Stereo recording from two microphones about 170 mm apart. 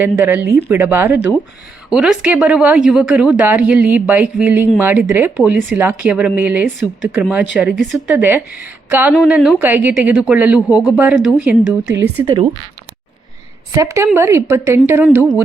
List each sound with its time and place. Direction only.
0.0 s speech: 10° right (ahead or behind)
13.7 s speech: 15° right (ahead or behind)